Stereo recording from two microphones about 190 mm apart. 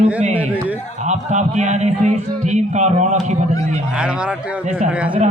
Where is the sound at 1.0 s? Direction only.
40° right (ahead or behind).